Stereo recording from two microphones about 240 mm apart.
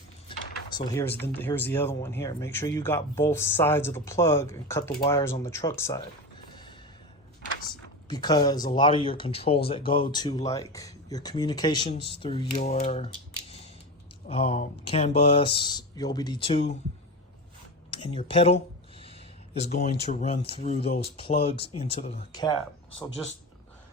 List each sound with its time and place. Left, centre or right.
0.9 s speech: centre
8.0 s speech: centre
14.3 s speech: left
17.9 s speech: left